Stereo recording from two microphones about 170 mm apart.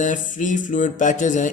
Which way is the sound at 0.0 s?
50° left (ahead or behind).